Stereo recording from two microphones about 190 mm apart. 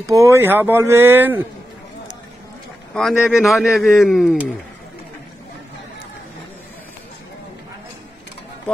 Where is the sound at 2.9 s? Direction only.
Centre (ahead or behind).